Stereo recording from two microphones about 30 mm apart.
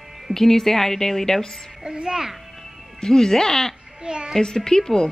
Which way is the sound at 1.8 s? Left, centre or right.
Right.